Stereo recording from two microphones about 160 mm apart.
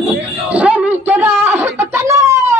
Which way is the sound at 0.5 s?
10° right (ahead or behind).